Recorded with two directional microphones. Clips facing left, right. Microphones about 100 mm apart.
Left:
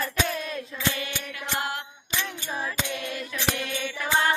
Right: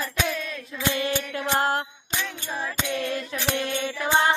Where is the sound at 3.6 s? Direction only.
30° right (ahead or behind).